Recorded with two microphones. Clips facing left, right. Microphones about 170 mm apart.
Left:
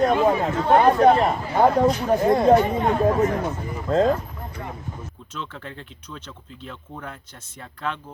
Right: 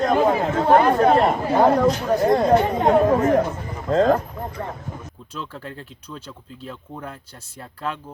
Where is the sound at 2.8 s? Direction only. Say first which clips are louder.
Right 3 dB; 40° right (ahead or behind).